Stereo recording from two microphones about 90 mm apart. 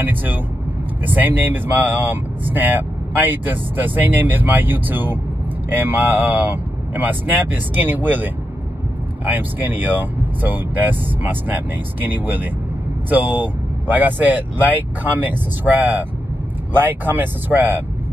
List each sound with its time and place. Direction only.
0.0 s speech: 20° right (ahead or behind)